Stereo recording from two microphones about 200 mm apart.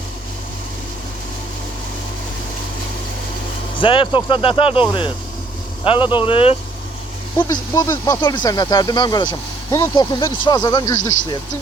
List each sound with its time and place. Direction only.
3.8 s speech: 25° left (ahead or behind)
7.7 s speech: 15° left (ahead or behind)